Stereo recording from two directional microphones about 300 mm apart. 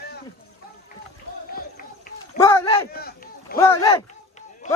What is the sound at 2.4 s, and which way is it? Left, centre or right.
Speech, centre.